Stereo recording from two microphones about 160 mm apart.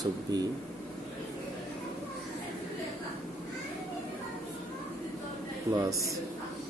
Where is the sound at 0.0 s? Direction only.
25° right (ahead or behind).